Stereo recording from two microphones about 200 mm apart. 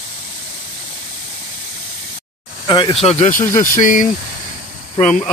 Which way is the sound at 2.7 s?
25° left (ahead or behind).